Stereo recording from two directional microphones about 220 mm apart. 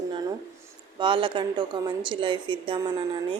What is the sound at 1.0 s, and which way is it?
A woman's voice, 25° right (ahead or behind).